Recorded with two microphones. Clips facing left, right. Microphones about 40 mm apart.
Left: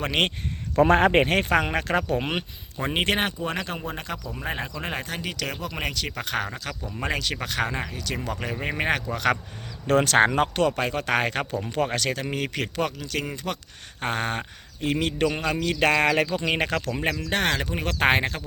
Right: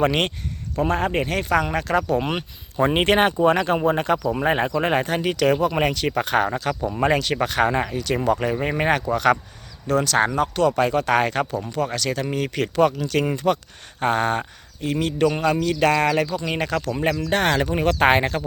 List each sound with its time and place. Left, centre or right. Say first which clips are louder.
0.8 s speech: left 4 dB; left
1.3 s speech: right 1 dB; left
2.8 s speech: right 7 dB; centre
8.4 s speech: right 6 dB; centre
9.8 s speech: even; left
10.1 s speech: even; left
10.7 s speech: right 5 dB; centre
11.7 s speech: right 1 dB; left
12.0 s speech: right 3 dB; centre
14.0 s speech: right 6 dB; centre
14.8 s speech: right 1 dB; left
15.2 s speech: right 8 dB; centre
15.5 s speech: right 3 dB; left
16.8 s speech: right 4 dB; centre